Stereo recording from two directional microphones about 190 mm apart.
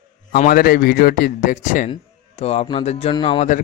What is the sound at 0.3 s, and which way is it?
A man's voice, 50° left (ahead or behind).